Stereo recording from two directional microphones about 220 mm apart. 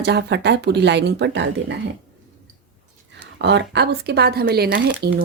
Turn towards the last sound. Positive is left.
turn(degrees=-45)  # may be behind; listen again after turning